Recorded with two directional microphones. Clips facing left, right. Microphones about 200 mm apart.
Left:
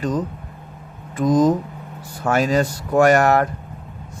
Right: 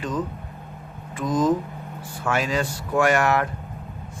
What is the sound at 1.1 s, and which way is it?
Speech, 40° left (ahead or behind).